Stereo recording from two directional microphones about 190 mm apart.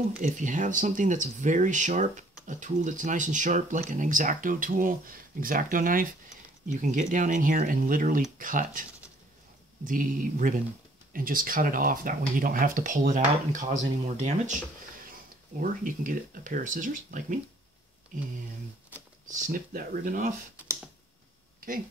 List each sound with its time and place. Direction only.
0.2 s speech: 40° right (ahead or behind)
9.8 s speech: 45° right (ahead or behind)
15.6 s speech: 45° right (ahead or behind)
19.2 s speech: 40° right (ahead or behind)
21.5 s a sound: 50° right (ahead or behind)